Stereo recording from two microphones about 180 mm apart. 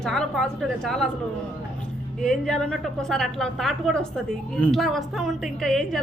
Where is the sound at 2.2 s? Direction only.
Centre (ahead or behind).